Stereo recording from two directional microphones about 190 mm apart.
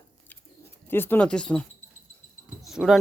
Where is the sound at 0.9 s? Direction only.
10° left (ahead or behind).